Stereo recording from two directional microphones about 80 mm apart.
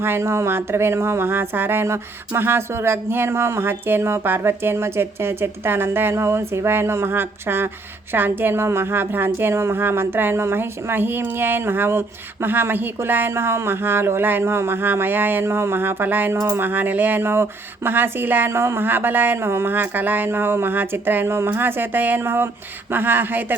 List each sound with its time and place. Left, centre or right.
0.0 s a woman's voice: right